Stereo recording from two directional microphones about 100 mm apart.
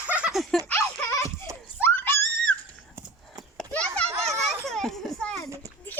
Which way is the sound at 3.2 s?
Centre (ahead or behind).